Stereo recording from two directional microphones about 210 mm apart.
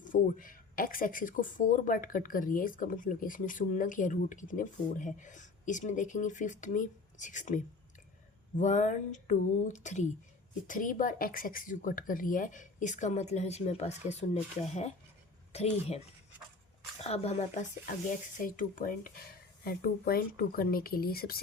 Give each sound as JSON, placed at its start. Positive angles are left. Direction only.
{"t": 0.0, "sound": "a woman's voice", "side_deg": 40}
{"t": 17.0, "sound": "speech", "side_deg": 30}